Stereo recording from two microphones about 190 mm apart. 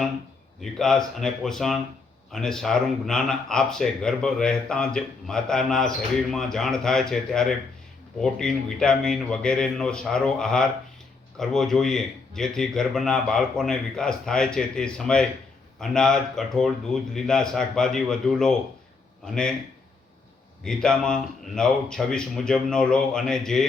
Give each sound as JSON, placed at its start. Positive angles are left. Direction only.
{"t": 0.6, "sound": "speech", "side_deg": 0}
{"t": 20.7, "sound": "speech", "side_deg": 5}